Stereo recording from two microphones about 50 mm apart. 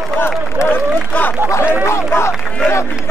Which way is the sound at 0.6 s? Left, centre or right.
Left.